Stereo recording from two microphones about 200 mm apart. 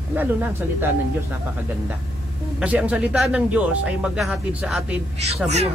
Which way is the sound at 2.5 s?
5° right (ahead or behind).